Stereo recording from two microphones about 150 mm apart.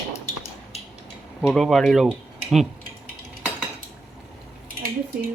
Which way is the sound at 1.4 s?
Centre (ahead or behind).